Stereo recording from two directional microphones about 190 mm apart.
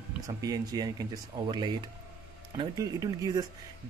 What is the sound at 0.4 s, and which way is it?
Speech, 20° right (ahead or behind).